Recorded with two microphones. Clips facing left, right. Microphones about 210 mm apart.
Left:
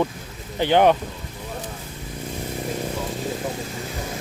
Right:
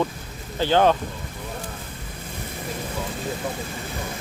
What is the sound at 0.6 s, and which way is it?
Speech, 15° left (ahead or behind).